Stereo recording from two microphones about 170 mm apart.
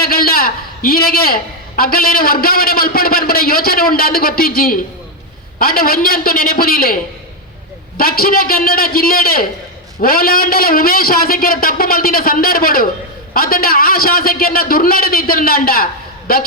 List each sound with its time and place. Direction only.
0.0 s a woman's voice: 60° left (ahead or behind)